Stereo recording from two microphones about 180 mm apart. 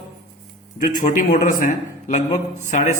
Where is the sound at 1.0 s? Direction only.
45° left (ahead or behind).